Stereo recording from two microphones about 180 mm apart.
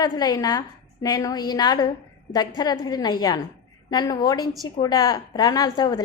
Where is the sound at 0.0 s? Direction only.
20° left (ahead or behind).